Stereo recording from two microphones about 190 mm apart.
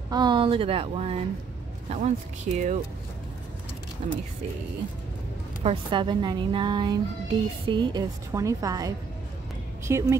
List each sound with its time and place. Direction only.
0.1 s a woman's voice: 25° right (ahead or behind); by 2.8 s 40° right (ahead or behind)
4.0 s speech: 35° right (ahead or behind)
5.6 s a woman's voice: 30° right (ahead or behind)